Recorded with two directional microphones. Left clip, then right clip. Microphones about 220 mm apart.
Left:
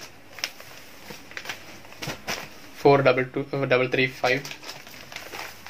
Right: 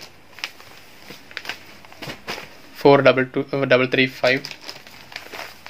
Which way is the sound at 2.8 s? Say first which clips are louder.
Right 5 dB; 45° right (ahead or behind).